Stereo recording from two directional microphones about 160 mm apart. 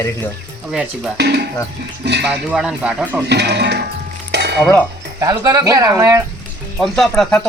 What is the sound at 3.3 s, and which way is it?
Speech, 90° right.